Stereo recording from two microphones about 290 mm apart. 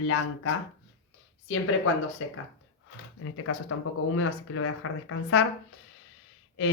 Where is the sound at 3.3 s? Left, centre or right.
Left.